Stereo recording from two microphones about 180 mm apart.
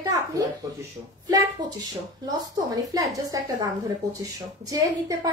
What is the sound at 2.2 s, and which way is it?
A woman's voice, 20° right (ahead or behind).